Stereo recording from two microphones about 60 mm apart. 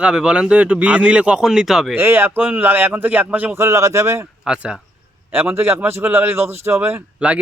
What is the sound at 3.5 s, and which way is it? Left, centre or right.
Speech, right.